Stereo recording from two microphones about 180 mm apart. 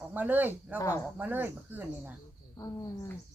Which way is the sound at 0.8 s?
15° left (ahead or behind).